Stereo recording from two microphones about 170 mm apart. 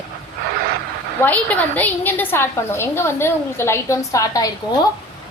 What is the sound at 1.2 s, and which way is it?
A woman's voice, 10° left (ahead or behind).